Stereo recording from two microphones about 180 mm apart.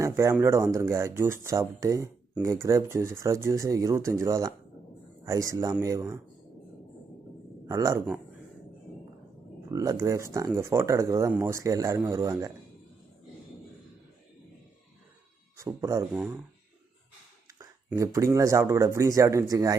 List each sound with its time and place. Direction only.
0.0 s speech: 15° right (ahead or behind)
7.7 s speech: 15° right (ahead or behind)
9.7 s speech: 20° right (ahead or behind)
15.5 s speech: 15° right (ahead or behind)
17.6 s speech: 15° right (ahead or behind)